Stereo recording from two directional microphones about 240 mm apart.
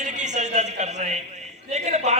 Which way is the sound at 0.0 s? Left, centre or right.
Right.